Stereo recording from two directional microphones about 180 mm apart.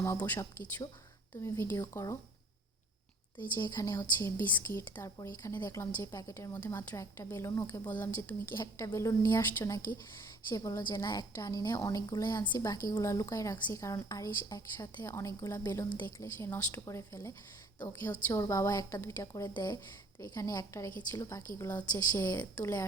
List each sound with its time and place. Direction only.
0.0 s a woman's voice: 10° left (ahead or behind)
1.5 s a woman's voice: 15° left (ahead or behind)
3.6 s a woman's voice: 20° left (ahead or behind)